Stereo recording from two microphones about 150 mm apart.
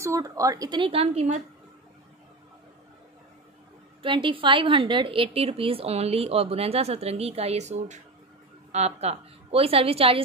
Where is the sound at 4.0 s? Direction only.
35° right (ahead or behind).